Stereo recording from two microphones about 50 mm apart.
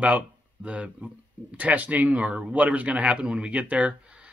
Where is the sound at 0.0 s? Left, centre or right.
Right.